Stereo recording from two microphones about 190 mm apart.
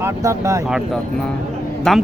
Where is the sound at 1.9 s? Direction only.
Centre (ahead or behind).